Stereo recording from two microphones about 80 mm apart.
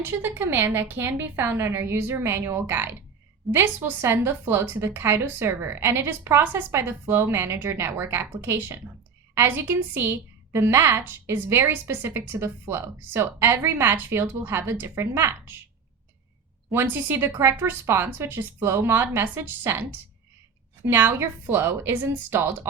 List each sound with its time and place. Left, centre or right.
0.0 s a woman's voice: right
16.7 s a woman's voice: right